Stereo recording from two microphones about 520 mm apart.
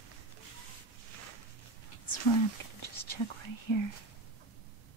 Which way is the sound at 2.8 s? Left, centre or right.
Left.